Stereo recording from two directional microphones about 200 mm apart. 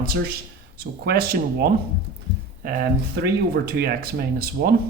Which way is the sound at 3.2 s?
55° right (ahead or behind).